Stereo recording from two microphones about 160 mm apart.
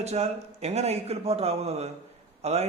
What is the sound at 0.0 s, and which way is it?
A man's voice, 40° right (ahead or behind).